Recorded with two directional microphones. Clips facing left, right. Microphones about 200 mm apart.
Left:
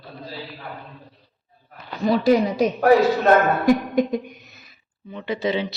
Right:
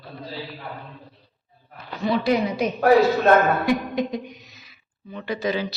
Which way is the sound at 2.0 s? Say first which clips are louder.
Left 4 dB; 40° left (ahead or behind).